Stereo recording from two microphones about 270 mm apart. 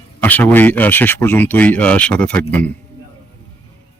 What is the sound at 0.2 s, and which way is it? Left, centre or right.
Speech, centre.